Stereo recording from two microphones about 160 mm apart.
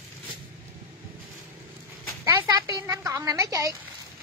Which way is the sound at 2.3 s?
20° right (ahead or behind).